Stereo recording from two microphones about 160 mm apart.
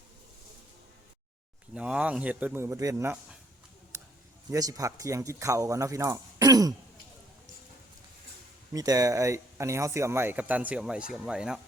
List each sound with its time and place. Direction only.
1.7 s speech: 5° right (ahead or behind)
4.5 s speech: 20° right (ahead or behind)
8.7 s speech: 20° right (ahead or behind); by 11.6 s 5° right (ahead or behind)